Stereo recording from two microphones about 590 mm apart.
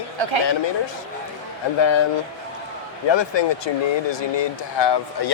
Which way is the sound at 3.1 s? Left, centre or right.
Left.